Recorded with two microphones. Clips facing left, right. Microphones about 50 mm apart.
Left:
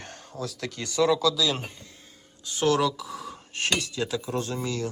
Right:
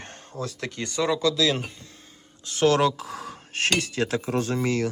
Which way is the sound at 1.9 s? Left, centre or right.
Right.